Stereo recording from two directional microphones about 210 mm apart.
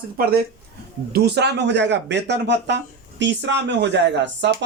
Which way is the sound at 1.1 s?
50° right (ahead or behind).